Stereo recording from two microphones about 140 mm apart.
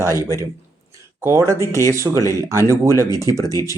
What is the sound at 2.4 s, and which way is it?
Speech, 20° right (ahead or behind).